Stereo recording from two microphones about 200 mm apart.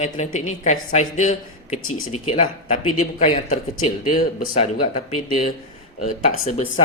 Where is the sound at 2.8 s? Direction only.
90° left.